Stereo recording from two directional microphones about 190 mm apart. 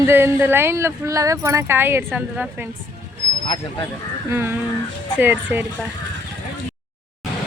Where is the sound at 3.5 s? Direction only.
25° left (ahead or behind).